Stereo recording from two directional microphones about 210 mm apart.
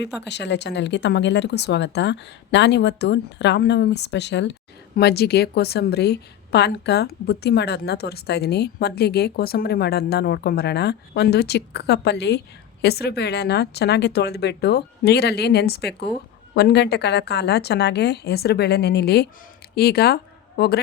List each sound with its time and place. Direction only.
0.0 s a woman's voice: 55° left (ahead or behind)